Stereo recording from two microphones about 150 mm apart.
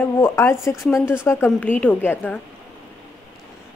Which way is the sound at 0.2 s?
20° left (ahead or behind).